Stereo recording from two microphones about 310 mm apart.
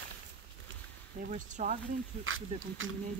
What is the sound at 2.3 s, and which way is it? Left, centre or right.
Speech, right.